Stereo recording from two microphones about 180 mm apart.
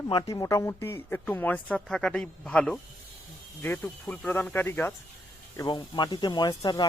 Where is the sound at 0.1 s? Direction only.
25° left (ahead or behind).